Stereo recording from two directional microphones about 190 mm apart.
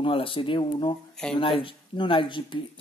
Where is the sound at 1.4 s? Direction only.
25° left (ahead or behind).